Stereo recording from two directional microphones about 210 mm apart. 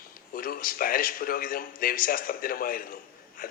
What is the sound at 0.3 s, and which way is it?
Speech, 45° left (ahead or behind).